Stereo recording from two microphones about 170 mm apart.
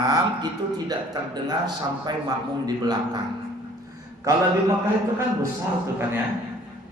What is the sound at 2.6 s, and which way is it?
Speech, 25° right (ahead or behind).